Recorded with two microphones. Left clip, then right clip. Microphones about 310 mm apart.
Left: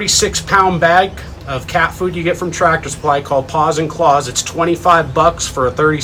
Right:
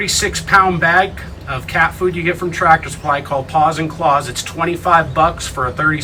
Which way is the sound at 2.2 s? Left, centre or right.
Centre.